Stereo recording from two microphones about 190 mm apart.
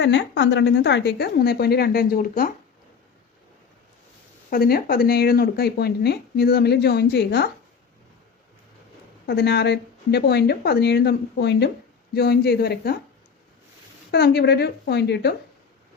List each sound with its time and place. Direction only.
0.0 s speech: 65° left (ahead or behind); by 2.5 s 50° left (ahead or behind)
4.4 s speech: 50° left (ahead or behind)
9.2 s speech: 60° left (ahead or behind)
14.1 s speech: 60° left (ahead or behind)